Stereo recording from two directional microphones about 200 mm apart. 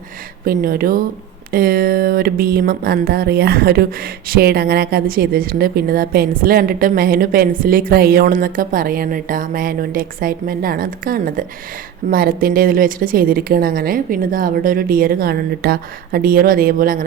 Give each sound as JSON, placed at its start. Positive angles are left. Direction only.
{"t": 0.4, "sound": "speech", "side_deg": -45}